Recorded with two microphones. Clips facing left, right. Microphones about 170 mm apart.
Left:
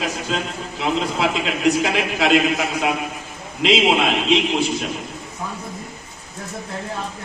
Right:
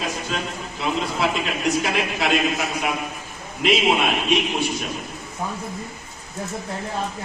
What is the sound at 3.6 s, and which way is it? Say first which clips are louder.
A man's voice: left 2 dB; 90° left.